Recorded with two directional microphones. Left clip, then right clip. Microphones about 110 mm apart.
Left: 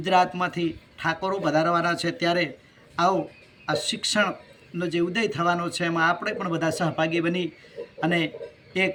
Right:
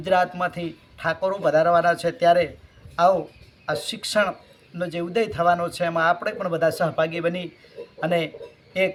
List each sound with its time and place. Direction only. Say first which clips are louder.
0.1 s speech: even; 35° right (ahead or behind)
3.7 s speech: left 1 dB; 35° right (ahead or behind)